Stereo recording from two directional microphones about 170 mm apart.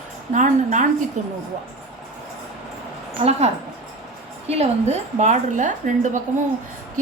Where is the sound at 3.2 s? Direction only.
40° right (ahead or behind).